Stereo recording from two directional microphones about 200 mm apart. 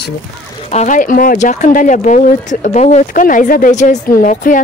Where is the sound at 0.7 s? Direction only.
35° left (ahead or behind).